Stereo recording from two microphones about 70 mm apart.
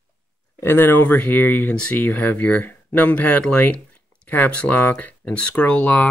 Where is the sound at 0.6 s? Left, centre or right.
Left.